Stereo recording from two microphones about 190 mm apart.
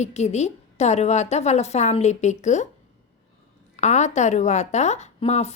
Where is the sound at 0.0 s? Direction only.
35° left (ahead or behind).